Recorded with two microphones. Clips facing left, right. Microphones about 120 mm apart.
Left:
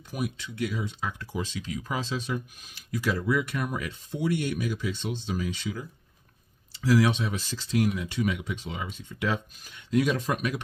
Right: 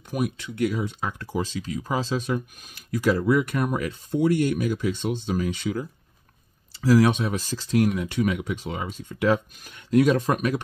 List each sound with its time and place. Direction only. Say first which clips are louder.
0.1 s speech: right 5 dB; 50° right (ahead or behind)